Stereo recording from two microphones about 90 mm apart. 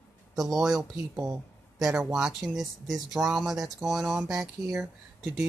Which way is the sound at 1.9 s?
10° right (ahead or behind).